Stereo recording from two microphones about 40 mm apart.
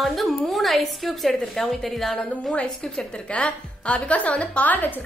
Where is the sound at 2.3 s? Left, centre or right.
Left.